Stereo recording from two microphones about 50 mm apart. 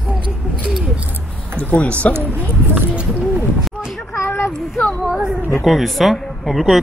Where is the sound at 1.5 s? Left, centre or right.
Left.